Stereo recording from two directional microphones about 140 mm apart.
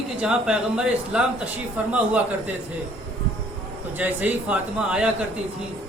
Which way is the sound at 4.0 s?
10° right (ahead or behind).